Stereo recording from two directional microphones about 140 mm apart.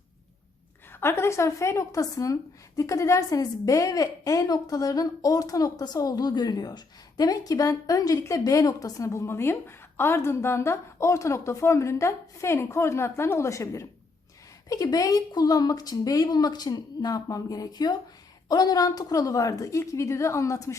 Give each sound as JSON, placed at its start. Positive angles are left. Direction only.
{"t": 0.9, "sound": "a woman's voice", "side_deg": 15}